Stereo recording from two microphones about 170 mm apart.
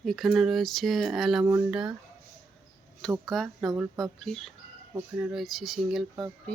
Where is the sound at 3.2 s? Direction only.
Centre (ahead or behind).